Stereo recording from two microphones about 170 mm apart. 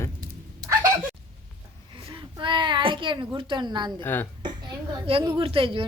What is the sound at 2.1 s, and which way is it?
A child's voice, 30° right (ahead or behind).